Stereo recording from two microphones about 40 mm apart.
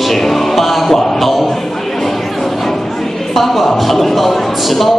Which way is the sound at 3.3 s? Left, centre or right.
Centre.